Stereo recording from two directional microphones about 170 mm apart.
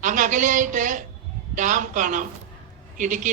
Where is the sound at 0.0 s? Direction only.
50° right (ahead or behind).